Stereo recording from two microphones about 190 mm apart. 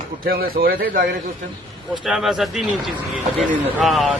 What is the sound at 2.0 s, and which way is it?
Speech, centre (ahead or behind).